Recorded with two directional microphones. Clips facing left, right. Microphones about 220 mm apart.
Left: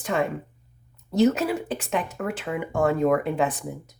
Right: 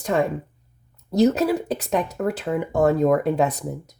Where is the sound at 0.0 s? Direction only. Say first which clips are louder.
Right 4 dB; 40° right (ahead or behind).